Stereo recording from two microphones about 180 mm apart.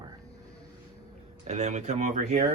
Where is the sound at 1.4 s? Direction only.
40° right (ahead or behind).